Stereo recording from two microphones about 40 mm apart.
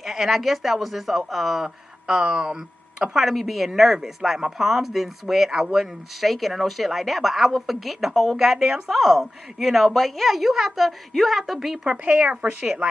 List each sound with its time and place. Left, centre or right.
0.0 s speech: centre
3.2 s speech: centre
6.2 s speech: centre
11.9 s speech: right